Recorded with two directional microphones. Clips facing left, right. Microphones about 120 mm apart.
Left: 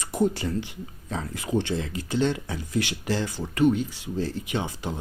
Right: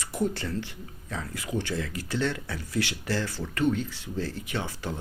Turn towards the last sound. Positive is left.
turn(degrees=20)  # may be behind; listen again after turning